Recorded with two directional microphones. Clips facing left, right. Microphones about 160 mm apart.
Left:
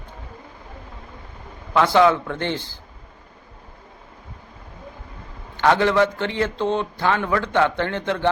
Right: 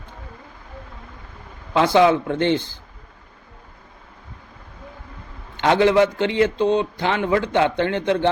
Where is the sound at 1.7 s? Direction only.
20° right (ahead or behind).